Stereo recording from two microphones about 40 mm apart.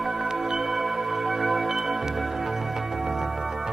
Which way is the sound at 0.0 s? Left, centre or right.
Centre.